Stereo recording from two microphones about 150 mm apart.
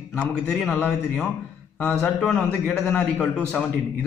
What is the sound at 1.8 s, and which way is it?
A man's voice, 5° left (ahead or behind).